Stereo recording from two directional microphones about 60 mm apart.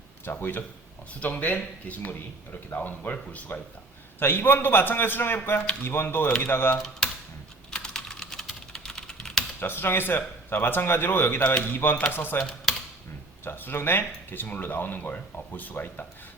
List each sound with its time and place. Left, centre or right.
0.3 s speech: left
1.2 s speech: left
6.7 s speech: centre
7.7 s typing: centre
9.6 s speech: left
12.7 s typing: centre
13.4 s speech: left